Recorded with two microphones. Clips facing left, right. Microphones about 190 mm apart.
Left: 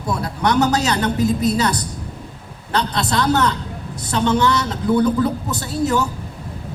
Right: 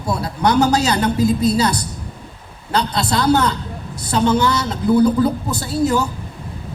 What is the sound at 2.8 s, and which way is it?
A woman's voice, 30° right (ahead or behind).